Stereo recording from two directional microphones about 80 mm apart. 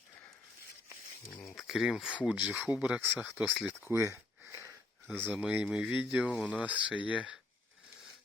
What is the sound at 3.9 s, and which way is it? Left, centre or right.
Speech, right.